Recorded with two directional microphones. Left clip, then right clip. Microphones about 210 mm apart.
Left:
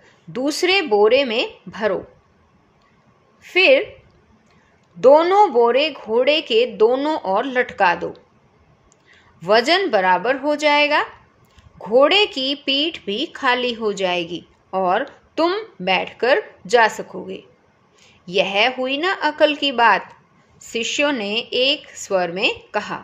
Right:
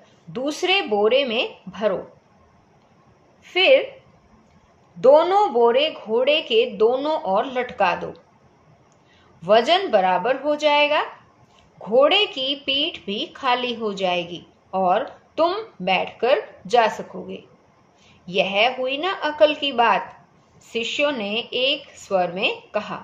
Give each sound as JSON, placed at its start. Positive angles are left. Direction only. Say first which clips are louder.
{"t": 0.3, "sound": "speech", "louder": "left 3 dB", "side_deg": 45}
{"t": 3.4, "sound": "speech", "louder": "left 2 dB", "side_deg": 45}
{"t": 5.0, "sound": "speech", "louder": "left 3 dB", "side_deg": 45}
{"t": 9.4, "sound": "speech", "louder": "left 1 dB", "side_deg": 45}